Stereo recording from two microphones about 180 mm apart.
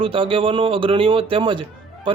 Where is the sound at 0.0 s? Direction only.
30° right (ahead or behind).